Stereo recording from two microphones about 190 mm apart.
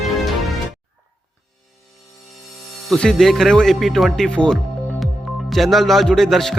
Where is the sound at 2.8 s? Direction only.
5° left (ahead or behind).